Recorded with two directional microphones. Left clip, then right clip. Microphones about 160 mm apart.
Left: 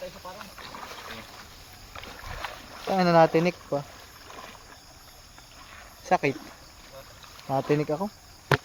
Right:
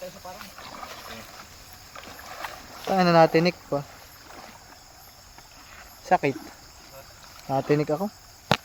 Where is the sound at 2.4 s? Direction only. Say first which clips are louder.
Right 1 dB; 15° right (ahead or behind).